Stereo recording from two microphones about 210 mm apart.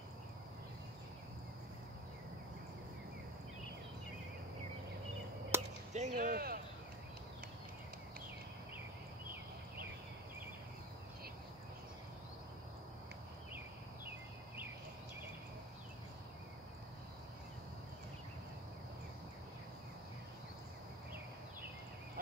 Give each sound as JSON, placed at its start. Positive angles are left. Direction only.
{"t": 5.5, "sound": "chop", "side_deg": -10}
{"t": 5.9, "sound": "speech", "side_deg": -40}